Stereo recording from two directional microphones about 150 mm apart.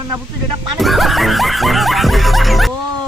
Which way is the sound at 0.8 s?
Centre (ahead or behind).